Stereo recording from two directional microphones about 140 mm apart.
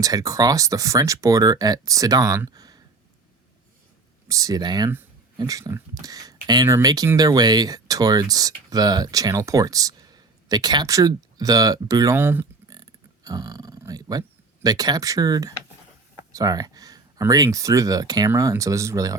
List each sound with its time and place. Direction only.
0.0 s speech: 25° right (ahead or behind)
4.3 s speech: 25° right (ahead or behind)
12.7 s speech: 25° right (ahead or behind)